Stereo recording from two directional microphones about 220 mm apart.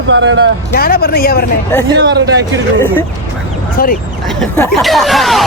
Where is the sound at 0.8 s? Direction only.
45° left (ahead or behind).